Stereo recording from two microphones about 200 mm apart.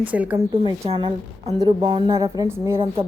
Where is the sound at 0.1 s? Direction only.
5° right (ahead or behind).